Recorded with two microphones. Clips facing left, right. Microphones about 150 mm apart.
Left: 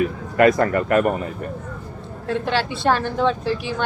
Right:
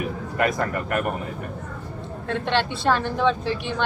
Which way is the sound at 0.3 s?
70° left (ahead or behind).